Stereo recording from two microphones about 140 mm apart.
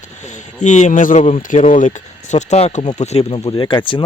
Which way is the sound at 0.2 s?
60° left (ahead or behind).